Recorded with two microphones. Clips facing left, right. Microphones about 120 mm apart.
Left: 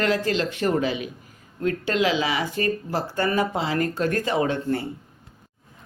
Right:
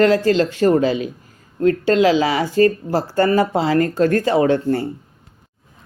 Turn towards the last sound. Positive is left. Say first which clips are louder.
# right 7 dB
turn(degrees=-35)  # may be behind; listen again after turning